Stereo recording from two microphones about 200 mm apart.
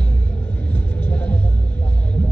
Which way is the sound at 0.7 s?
5° left (ahead or behind).